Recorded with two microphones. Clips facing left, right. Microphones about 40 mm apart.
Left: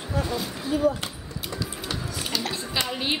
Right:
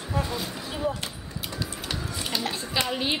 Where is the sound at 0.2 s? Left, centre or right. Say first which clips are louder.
Left 3 dB; centre.